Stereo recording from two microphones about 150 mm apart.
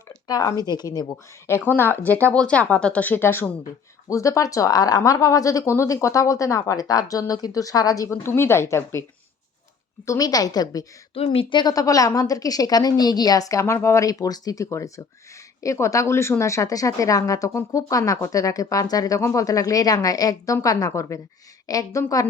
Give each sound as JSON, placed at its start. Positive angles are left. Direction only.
{"t": 0.3, "sound": "speech", "side_deg": 25}
{"t": 1.1, "sound": "a woman's voice", "side_deg": 15}
{"t": 10.1, "sound": "speech", "side_deg": 25}
{"t": 11.1, "sound": "speech", "side_deg": 40}